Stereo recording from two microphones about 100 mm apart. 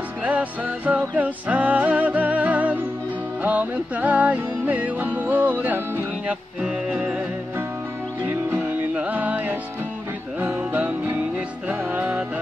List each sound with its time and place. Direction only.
0.2 s music: 15° right (ahead or behind)
8.3 s music: 20° right (ahead or behind)